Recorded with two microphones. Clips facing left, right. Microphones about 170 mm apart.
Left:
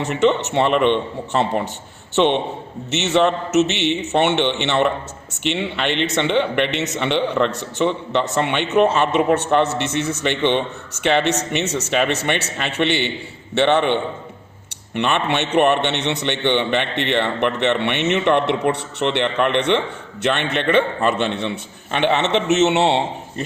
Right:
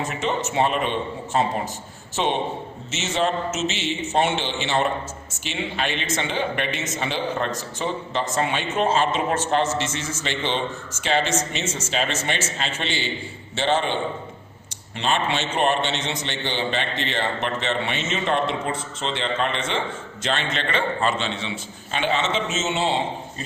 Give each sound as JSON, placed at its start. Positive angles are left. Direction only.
{"t": 0.0, "sound": "a man's voice", "side_deg": 70}